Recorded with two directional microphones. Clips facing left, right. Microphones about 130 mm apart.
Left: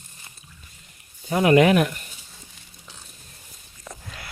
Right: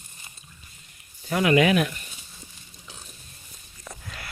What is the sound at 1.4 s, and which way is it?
Speech, 50° left (ahead or behind).